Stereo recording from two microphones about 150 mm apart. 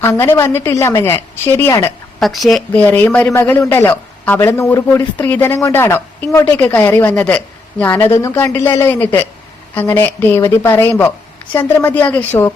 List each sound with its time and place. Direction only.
0.0 s a woman's voice: 15° left (ahead or behind)
2.1 s a woman's voice: centre (ahead or behind)
2.7 s a woman's voice: 10° left (ahead or behind)